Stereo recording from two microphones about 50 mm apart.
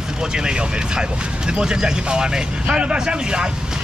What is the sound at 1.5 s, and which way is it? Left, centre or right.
Speech, centre.